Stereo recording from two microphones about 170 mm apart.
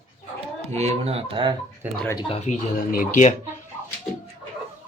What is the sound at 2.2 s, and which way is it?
Speech, 35° left (ahead or behind).